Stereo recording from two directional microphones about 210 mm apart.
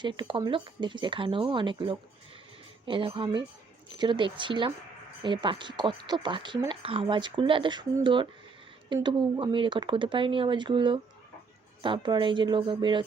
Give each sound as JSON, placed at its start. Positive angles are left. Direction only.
{"t": 0.0, "sound": "speech", "side_deg": -20}